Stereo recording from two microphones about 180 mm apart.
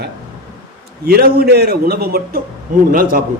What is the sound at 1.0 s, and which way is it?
A man's voice, 60° right (ahead or behind).